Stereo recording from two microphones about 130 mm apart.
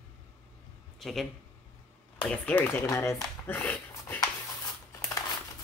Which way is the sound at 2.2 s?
10° left (ahead or behind).